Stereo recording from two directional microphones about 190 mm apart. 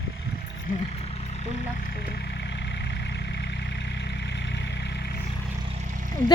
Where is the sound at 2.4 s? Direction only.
65° left (ahead or behind).